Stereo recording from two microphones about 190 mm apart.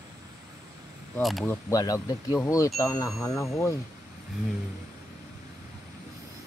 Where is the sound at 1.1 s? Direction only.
5° left (ahead or behind).